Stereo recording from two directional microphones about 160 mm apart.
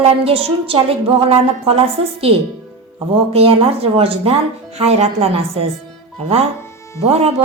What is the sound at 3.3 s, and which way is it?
Music, 40° right (ahead or behind).